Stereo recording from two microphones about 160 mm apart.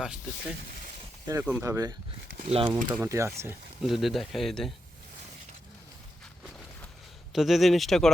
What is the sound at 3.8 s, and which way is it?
Speech, centre (ahead or behind).